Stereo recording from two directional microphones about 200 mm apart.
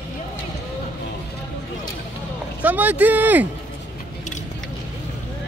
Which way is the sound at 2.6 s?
10° right (ahead or behind).